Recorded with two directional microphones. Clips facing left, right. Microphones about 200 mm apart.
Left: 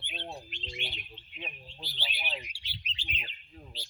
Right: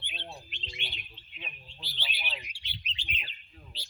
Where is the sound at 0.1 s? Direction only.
40° left (ahead or behind).